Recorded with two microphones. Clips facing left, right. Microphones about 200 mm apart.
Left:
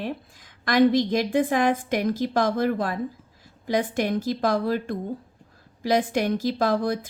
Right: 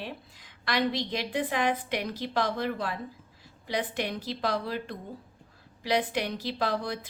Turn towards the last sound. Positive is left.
turn(degrees=45)  # may be behind; listen again after turning